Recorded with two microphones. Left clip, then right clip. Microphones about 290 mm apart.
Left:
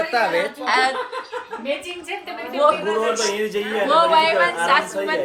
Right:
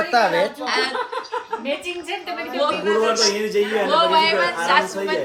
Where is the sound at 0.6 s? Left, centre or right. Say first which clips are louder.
Left 3 dB; centre.